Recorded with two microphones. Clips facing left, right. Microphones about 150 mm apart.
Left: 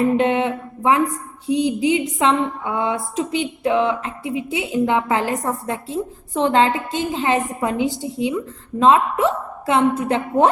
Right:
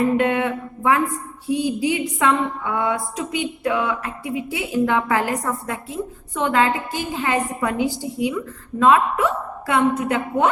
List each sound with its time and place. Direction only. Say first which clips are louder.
0.2 s a woman's voice: left 2 dB; 25° left (ahead or behind)